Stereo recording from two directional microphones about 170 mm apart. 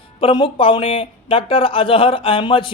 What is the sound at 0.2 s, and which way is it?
Speech, 30° left (ahead or behind).